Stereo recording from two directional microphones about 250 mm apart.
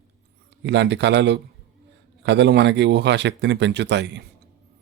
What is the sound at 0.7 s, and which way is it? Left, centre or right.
Speech, right.